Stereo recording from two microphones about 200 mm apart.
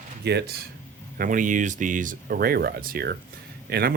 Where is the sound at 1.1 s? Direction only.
45° right (ahead or behind).